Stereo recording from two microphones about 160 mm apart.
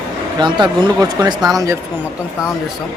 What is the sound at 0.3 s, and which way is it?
Speech, 30° right (ahead or behind).